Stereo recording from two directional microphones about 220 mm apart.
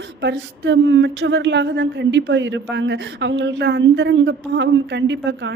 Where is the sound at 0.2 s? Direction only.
50° right (ahead or behind).